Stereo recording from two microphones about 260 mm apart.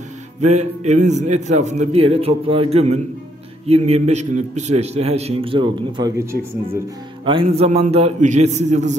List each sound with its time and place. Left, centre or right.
0.4 s a man's voice: right
7.2 s a man's voice: right